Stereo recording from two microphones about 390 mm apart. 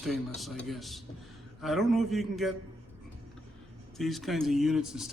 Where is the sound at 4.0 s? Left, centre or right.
Centre.